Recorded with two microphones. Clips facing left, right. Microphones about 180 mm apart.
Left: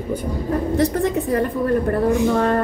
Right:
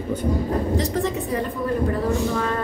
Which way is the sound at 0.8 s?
60° left (ahead or behind).